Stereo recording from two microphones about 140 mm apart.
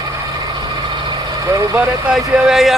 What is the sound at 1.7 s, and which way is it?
Speech, 5° right (ahead or behind).